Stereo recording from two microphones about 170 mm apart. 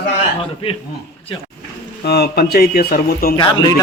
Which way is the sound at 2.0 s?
70° left (ahead or behind).